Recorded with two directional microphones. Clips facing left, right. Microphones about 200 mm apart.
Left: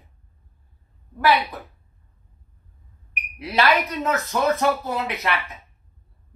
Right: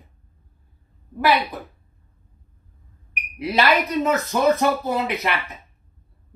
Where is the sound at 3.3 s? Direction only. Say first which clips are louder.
Right 1 dB; 15° right (ahead or behind).